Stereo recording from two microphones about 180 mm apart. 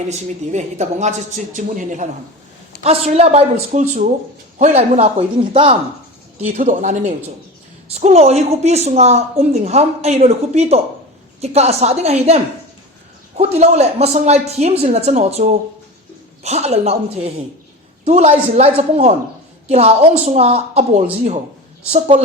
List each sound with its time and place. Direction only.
0.1 s a woman's voice: 40° right (ahead or behind)
19.7 s a woman's voice: 35° right (ahead or behind)